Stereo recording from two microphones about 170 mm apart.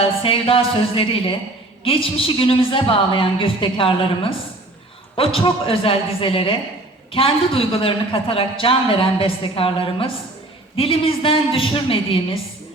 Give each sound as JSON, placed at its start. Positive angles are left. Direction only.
{"t": 0.0, "sound": "a woman's voice", "side_deg": 35}